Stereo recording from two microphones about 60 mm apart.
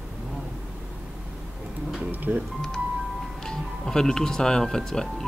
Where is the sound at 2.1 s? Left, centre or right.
Right.